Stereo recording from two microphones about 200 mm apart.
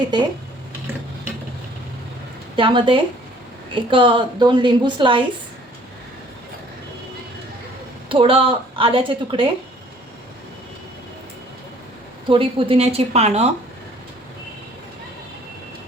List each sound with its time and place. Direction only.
2.6 s a woman's voice: 25° right (ahead or behind)
8.1 s a woman's voice: 25° right (ahead or behind)
12.3 s a woman's voice: 25° right (ahead or behind)